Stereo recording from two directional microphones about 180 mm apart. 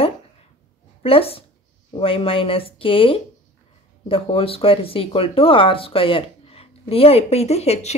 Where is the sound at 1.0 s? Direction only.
30° left (ahead or behind).